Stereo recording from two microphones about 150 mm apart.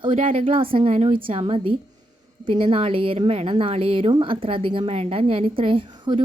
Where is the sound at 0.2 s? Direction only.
40° right (ahead or behind).